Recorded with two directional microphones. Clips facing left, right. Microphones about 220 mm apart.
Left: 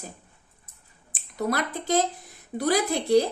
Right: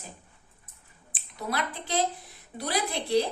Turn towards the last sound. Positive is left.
turn(degrees=45)  # may be behind; listen again after turning